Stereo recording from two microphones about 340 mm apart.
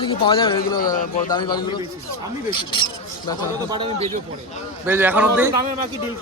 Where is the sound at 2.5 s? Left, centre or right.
Left.